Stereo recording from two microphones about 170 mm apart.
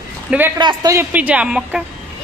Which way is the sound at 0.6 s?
25° right (ahead or behind).